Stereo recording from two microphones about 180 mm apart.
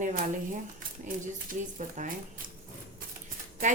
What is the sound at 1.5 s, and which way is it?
Speech, 45° right (ahead or behind).